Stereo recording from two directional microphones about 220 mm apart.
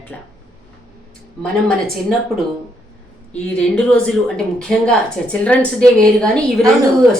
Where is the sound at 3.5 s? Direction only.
5° left (ahead or behind).